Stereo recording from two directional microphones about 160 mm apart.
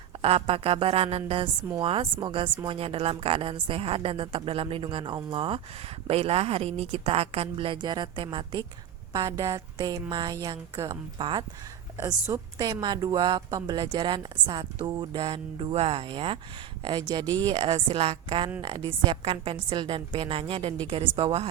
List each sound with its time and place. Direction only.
0.2 s a woman's voice: 35° right (ahead or behind)
11.9 s a woman's voice: 15° right (ahead or behind); by 21.4 s 35° right (ahead or behind)